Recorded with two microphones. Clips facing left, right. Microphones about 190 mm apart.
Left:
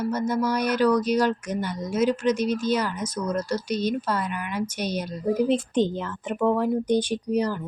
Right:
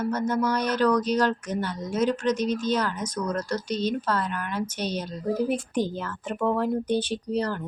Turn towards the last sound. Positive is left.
turn(degrees=10)  # may be behind; listen again after turning